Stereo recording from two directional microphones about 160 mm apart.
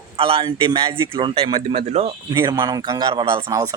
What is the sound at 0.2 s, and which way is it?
A man's voice, 35° right (ahead or behind).